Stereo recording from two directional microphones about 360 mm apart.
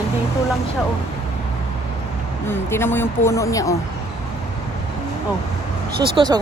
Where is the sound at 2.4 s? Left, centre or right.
Centre.